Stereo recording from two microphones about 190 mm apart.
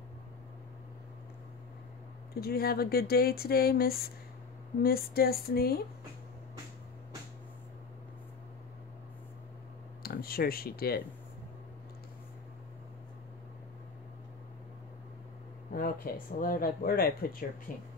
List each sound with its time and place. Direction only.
2.4 s speech: 55° left (ahead or behind)
10.0 s speech: 50° left (ahead or behind)
15.7 s speech: 50° left (ahead or behind)